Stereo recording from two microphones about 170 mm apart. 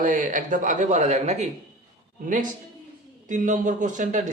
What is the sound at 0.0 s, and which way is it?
Speech, 50° right (ahead or behind).